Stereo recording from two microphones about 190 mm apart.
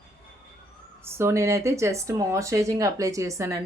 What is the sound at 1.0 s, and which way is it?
A woman's voice, 15° right (ahead or behind).